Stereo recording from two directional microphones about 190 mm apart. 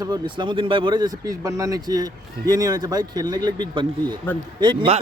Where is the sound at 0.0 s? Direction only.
20° right (ahead or behind).